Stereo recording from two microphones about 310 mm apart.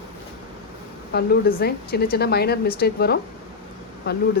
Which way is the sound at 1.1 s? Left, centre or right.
Left.